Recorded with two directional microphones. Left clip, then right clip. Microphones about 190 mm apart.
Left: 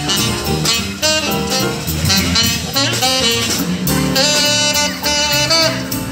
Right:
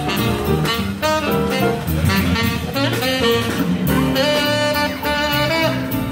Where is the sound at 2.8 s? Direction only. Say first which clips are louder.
Left 4 dB; 15° left (ahead or behind).